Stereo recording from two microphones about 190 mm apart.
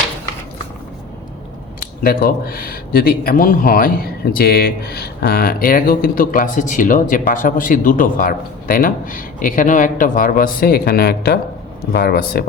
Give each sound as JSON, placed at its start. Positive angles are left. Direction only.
{"t": 2.0, "sound": "speech", "side_deg": 50}